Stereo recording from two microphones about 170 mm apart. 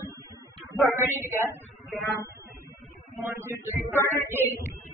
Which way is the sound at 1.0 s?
10° right (ahead or behind).